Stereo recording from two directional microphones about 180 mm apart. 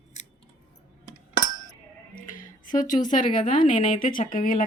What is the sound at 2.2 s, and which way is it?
A woman's voice, 50° left (ahead or behind).